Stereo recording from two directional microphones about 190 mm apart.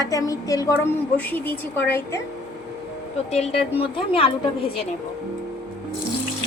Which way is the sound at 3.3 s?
30° left (ahead or behind).